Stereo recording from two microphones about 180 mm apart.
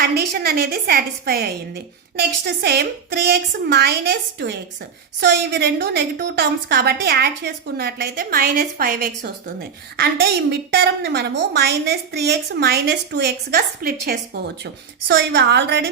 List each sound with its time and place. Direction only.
0.0 s a woman's voice: 60° right (ahead or behind)